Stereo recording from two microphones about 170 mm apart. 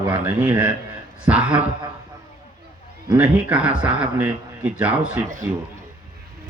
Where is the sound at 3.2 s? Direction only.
10° right (ahead or behind).